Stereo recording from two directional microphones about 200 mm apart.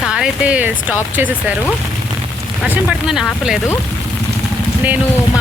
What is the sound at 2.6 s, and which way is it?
Speech, 5° right (ahead or behind).